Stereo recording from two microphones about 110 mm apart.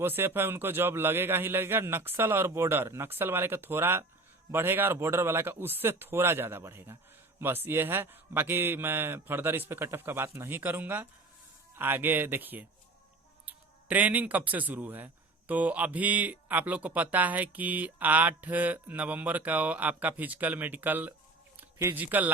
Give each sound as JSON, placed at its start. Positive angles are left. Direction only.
{"t": 0.0, "sound": "a man's voice", "side_deg": -20}